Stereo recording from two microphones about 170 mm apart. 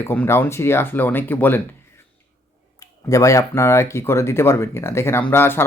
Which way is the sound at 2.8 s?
20° left (ahead or behind).